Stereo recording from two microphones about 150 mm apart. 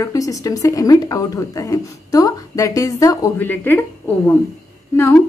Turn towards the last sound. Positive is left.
turn(degrees=15)  # may be behind; listen again after turning